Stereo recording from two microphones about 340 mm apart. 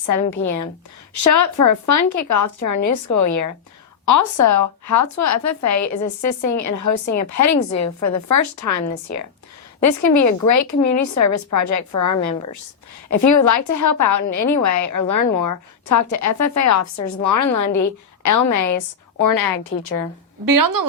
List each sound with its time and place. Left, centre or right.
0.1 s a woman's voice: left
9.8 s a woman's voice: left
19.2 s a woman's voice: left
20.4 s speech: right